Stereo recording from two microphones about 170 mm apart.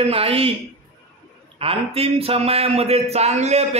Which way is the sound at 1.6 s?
35° right (ahead or behind).